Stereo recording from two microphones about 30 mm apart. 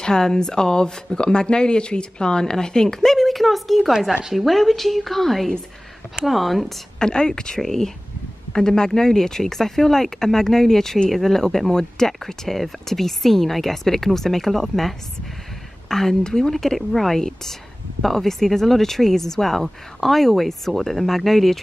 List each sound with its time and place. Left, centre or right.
0.0 s speech: left
3.1 s a sound: centre
4.3 s speech: centre
7.0 s speech: left
7.6 s speech: centre
11.7 s speech: centre